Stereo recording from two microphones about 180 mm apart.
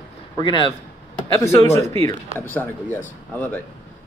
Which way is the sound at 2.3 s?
10° left (ahead or behind).